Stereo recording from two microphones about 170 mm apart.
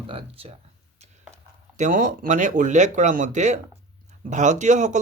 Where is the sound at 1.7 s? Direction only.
50° right (ahead or behind).